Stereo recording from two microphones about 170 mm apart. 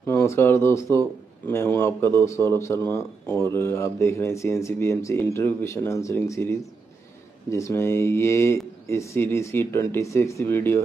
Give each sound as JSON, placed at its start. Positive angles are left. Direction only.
{"t": 0.0, "sound": "speech", "side_deg": 15}